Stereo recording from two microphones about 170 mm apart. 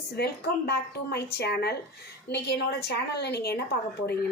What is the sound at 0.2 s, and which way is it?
A woman's voice, 70° left (ahead or behind).